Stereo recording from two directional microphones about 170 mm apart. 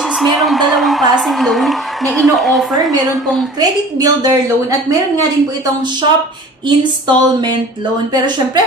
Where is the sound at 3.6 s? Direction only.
25° right (ahead or behind).